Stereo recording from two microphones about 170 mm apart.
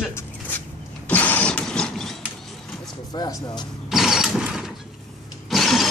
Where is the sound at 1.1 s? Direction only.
10° left (ahead or behind).